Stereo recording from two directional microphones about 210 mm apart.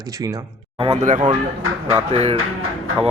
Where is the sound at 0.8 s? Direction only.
30° right (ahead or behind).